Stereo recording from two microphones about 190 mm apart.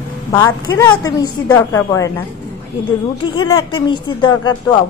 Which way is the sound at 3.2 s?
25° left (ahead or behind).